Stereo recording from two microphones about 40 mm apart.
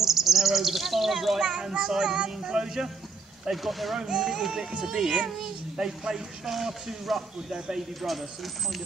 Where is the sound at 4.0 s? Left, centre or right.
Centre.